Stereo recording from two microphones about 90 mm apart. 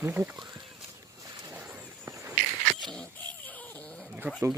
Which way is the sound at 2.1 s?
45° right (ahead or behind).